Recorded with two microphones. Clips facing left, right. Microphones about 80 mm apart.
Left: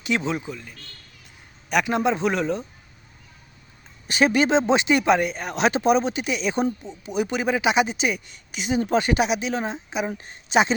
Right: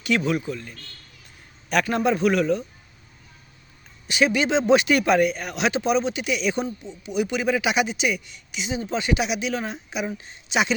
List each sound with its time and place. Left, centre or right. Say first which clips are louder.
0.0 s speech: right 2 dB; left
1.7 s a man's voice: even; centre
2.0 s speech: right 2 dB; left
4.0 s speech: left 2 dB; left
4.7 s speech: right 1 dB; left